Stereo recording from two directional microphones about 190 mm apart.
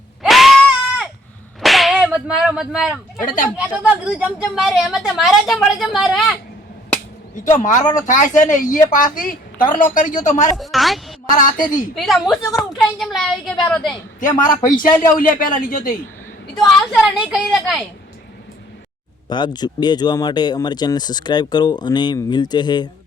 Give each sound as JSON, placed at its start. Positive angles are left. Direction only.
{"t": 0.2, "sound": "goat", "side_deg": 0}
{"t": 1.6, "sound": "whip", "side_deg": 0}
{"t": 3.2, "sound": "a woman's voice", "side_deg": 45}
{"t": 3.8, "sound": "a woman's voice", "side_deg": -10}
{"t": 7.5, "sound": "a woman's voice", "side_deg": 40}
{"t": 10.6, "sound": "a woman's voice", "side_deg": 0}
{"t": 11.3, "sound": "a woman's voice", "side_deg": 45}
{"t": 11.9, "sound": "a woman's voice", "side_deg": 0}
{"t": 14.2, "sound": "a woman's voice", "side_deg": 45}
{"t": 16.6, "sound": "a woman's voice", "side_deg": 0}
{"t": 19.3, "sound": "speech", "side_deg": 20}